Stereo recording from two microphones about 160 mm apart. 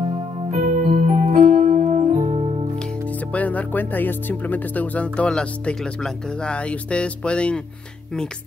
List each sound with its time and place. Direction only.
0.5 s keyboard: 45° right (ahead or behind)
1.7 s music: 45° right (ahead or behind)
3.3 s speech: 10° left (ahead or behind)